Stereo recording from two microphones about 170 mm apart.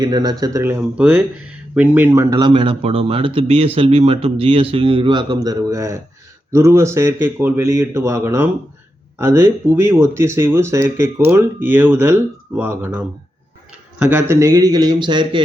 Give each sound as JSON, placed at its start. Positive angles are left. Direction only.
{"t": 0.0, "sound": "a man's voice", "side_deg": -25}
{"t": 2.3, "sound": "speech", "side_deg": -25}
{"t": 14.1, "sound": "a man's voice", "side_deg": -15}